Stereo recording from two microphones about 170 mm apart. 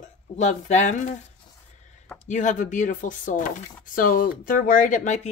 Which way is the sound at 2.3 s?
45° left (ahead or behind).